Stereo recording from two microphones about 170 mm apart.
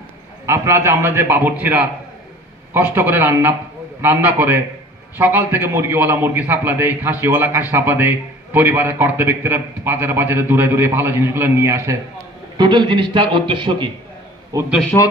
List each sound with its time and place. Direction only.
0.5 s a man's voice: 15° right (ahead or behind)
14.7 s a man's voice: 5° left (ahead or behind)